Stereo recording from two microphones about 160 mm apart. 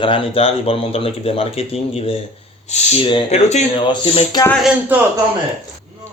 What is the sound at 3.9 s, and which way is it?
Speech, 30° left (ahead or behind).